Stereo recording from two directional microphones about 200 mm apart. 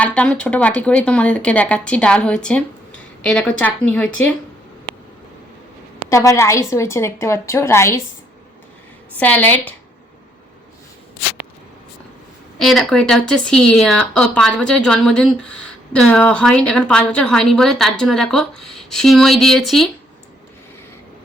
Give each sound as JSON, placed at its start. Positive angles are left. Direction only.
{"t": 0.0, "sound": "speech", "side_deg": 5}
{"t": 6.1, "sound": "a woman's voice", "side_deg": 15}
{"t": 9.1, "sound": "a woman's voice", "side_deg": 10}
{"t": 12.5, "sound": "speech", "side_deg": 0}